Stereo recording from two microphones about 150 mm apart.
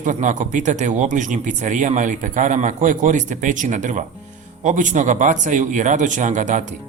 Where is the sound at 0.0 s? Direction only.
55° right (ahead or behind).